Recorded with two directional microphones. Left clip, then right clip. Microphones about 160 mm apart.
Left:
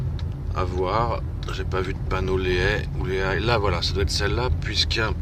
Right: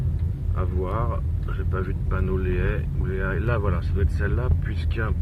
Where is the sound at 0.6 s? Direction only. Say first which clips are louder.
Left 6 dB; 25° left (ahead or behind).